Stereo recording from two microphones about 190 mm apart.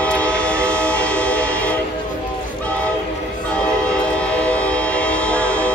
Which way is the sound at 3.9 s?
5° left (ahead or behind).